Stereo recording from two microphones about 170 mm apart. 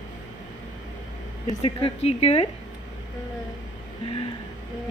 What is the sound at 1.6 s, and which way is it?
Speech, 30° left (ahead or behind).